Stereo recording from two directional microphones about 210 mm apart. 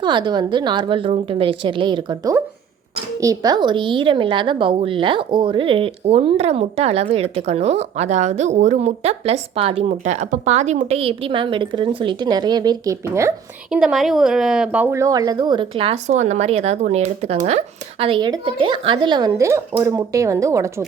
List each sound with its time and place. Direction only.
0.0 s a woman's voice: 20° right (ahead or behind)
13.7 s a woman's voice: 5° right (ahead or behind)